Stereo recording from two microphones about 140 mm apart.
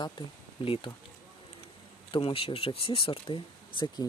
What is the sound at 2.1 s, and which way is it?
Speech, 40° left (ahead or behind).